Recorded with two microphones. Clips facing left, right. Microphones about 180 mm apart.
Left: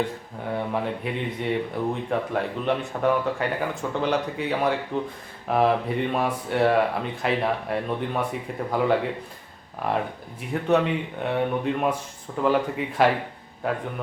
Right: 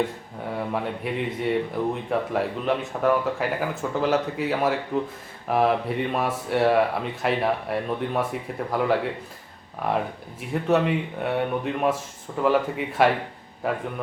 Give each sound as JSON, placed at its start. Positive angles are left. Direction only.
{"t": 0.7, "sound": "speech", "side_deg": 0}